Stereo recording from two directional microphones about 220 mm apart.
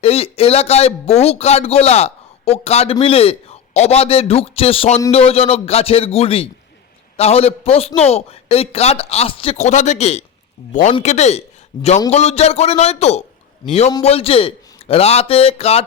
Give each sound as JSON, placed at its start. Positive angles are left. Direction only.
{"t": 0.0, "sound": "a man's voice", "side_deg": 25}